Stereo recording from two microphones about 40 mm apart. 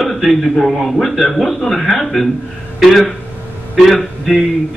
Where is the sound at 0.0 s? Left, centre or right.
Centre.